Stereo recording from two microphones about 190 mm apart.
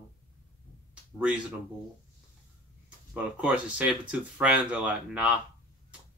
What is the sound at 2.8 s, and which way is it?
Speech, 5° right (ahead or behind).